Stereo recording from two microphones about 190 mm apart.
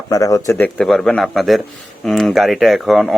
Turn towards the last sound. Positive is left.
turn(degrees=0)  # may be behind; listen again after turning